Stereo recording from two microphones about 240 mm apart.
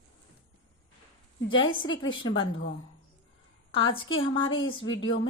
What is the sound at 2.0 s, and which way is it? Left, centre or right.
Speech, centre.